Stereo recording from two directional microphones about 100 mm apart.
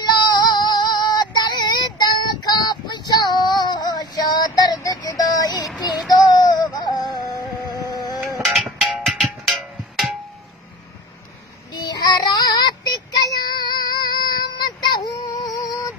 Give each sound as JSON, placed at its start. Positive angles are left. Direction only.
{"t": 0.0, "sound": "female singing", "side_deg": 45}
{"t": 4.8, "sound": "music", "side_deg": 40}
{"t": 5.3, "sound": "a sound", "side_deg": 40}
{"t": 8.5, "sound": "music", "side_deg": 0}
{"t": 11.7, "sound": "child singing", "side_deg": 45}